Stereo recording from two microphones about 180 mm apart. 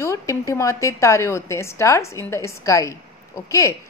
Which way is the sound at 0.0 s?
15° left (ahead or behind).